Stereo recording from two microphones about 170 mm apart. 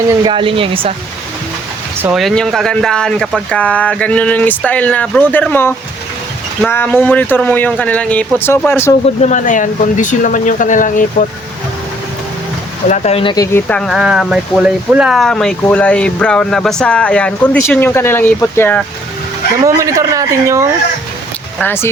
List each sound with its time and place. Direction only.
0.3 s speech: 30° right (ahead or behind)
2.1 s speech: centre (ahead or behind)
9.0 s speech: 40° left (ahead or behind)
12.9 s speech: 40° left (ahead or behind)
13.3 s speech: 20° left (ahead or behind)
13.7 s speech: 5° left (ahead or behind)
19.6 s speech: 20° right (ahead or behind)
21.6 s speech: 10° left (ahead or behind)